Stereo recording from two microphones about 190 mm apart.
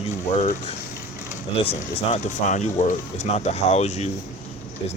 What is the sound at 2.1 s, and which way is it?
Speech, 40° left (ahead or behind).